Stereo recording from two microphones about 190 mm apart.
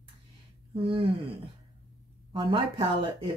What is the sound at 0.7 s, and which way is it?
Speech, 30° right (ahead or behind).